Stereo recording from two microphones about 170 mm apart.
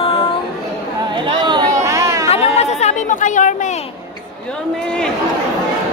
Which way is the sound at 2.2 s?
35° left (ahead or behind).